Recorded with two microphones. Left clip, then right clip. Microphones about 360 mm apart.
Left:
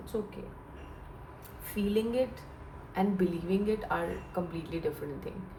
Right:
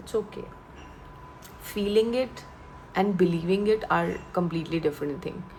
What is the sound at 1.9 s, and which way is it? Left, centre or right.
A woman's voice, right.